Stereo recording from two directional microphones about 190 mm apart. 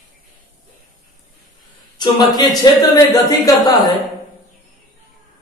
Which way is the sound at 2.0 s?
20° left (ahead or behind).